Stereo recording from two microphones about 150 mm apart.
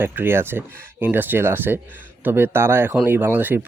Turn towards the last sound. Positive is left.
turn(degrees=-15)  # may be behind; listen again after turning